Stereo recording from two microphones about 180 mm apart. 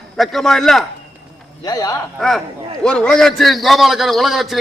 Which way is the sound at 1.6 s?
20° left (ahead or behind).